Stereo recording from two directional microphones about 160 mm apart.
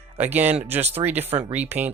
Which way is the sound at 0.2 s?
10° right (ahead or behind).